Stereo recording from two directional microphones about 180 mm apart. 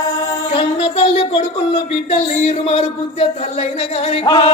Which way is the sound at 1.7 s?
35° left (ahead or behind).